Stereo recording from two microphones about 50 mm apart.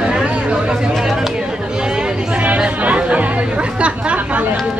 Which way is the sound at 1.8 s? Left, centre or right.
Centre.